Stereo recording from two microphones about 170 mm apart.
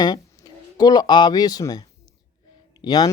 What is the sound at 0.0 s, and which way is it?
Speech, 25° left (ahead or behind).